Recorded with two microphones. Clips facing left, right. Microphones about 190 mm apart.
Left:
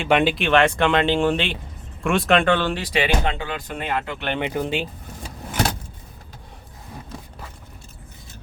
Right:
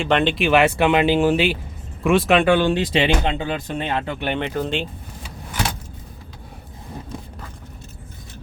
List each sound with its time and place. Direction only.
0.0 s speech: 10° left (ahead or behind)
0.3 s speech: 5° right (ahead or behind); by 4.2 s 25° right (ahead or behind)
4.4 s speech: 15° left (ahead or behind)